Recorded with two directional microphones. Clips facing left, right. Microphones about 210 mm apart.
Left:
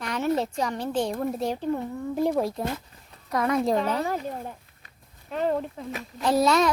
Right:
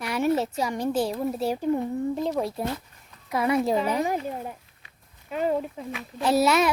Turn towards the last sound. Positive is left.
turn(degrees=-5)  # may be behind; listen again after turning